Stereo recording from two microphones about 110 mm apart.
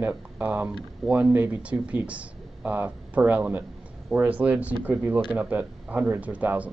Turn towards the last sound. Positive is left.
turn(degrees=-15)  # may be behind; listen again after turning